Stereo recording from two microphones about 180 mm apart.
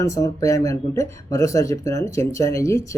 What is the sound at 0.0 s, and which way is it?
Speech, 20° left (ahead or behind).